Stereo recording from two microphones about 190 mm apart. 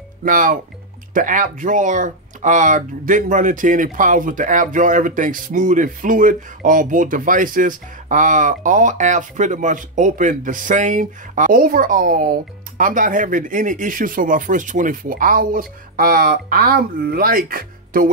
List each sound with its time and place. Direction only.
0.2 s speech: 45° right (ahead or behind)